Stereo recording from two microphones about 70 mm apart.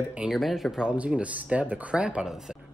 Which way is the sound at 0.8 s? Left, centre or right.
Centre.